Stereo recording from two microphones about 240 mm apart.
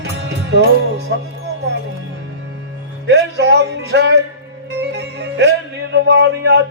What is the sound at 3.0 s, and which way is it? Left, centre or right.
Music, right.